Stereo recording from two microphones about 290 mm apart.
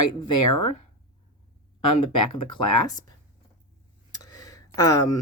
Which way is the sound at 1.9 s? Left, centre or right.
Centre.